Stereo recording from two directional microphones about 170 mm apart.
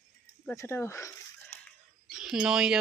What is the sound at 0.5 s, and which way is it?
Speech, 15° left (ahead or behind).